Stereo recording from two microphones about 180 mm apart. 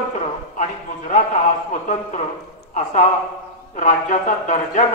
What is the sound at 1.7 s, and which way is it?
Speech, 40° left (ahead or behind).